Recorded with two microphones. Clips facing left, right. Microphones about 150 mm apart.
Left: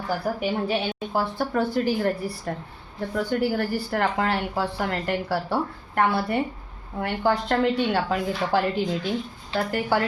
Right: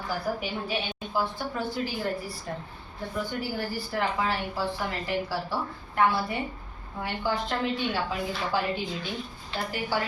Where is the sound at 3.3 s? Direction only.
70° left (ahead or behind).